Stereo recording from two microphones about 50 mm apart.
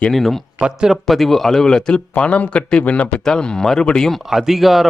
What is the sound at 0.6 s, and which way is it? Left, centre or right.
Speech, centre.